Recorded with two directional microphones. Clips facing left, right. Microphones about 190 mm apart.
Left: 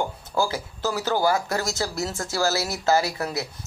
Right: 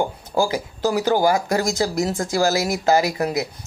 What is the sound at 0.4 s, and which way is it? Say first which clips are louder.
Speech: right 5 dB; 15° right (ahead or behind).